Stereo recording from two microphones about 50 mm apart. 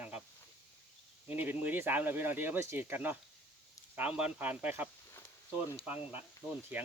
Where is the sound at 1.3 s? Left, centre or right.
Right.